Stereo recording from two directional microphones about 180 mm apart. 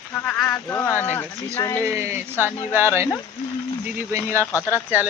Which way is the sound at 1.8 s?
15° right (ahead or behind).